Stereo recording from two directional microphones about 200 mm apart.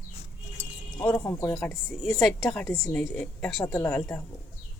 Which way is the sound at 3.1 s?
5° left (ahead or behind).